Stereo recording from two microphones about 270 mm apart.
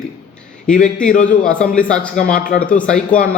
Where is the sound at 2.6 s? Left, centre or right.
Centre.